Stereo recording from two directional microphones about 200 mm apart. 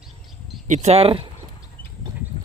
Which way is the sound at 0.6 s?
35° right (ahead or behind).